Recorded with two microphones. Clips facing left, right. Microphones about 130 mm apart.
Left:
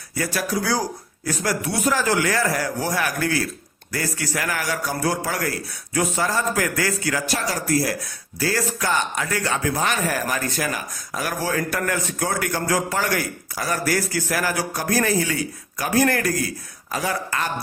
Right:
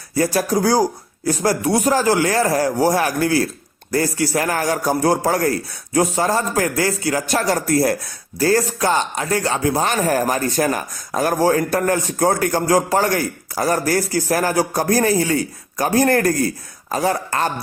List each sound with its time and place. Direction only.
0.3 s speech: 40° right (ahead or behind)
7.2 s speech: 50° right (ahead or behind)
8.9 s speech: 30° right (ahead or behind)